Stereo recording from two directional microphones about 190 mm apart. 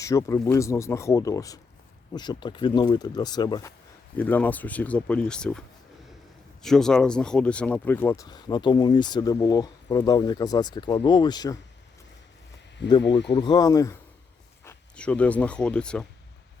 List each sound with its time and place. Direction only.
0.0 s speech: 15° left (ahead or behind)
4.2 s speech: 10° left (ahead or behind)
12.8 s speech: 65° left (ahead or behind)
13.3 s speech: 25° left (ahead or behind); by 16.0 s 5° left (ahead or behind)